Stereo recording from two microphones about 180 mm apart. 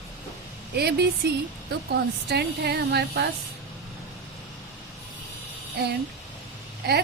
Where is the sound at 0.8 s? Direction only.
65° right (ahead or behind).